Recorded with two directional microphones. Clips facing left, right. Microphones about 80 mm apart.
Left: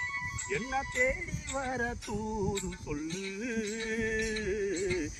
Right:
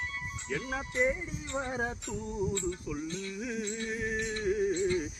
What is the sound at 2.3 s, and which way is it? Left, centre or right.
Music, left.